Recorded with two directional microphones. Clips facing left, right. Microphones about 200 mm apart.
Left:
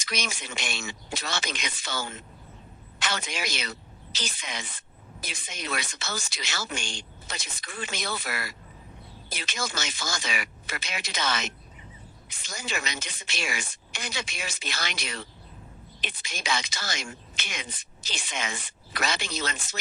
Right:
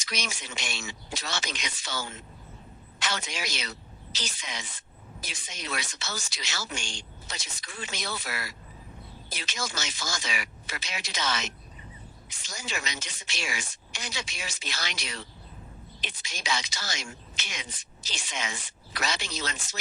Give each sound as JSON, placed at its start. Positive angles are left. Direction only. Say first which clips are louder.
{"t": 0.0, "sound": "a woman's voice", "louder": "left 2 dB", "side_deg": 55}